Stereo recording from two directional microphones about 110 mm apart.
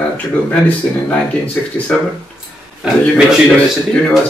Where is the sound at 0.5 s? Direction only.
10° left (ahead or behind).